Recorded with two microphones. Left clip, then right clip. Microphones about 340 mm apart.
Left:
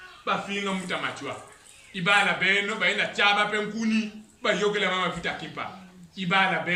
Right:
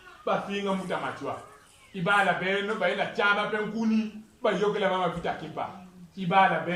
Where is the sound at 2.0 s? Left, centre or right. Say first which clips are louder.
Left 3 dB; right.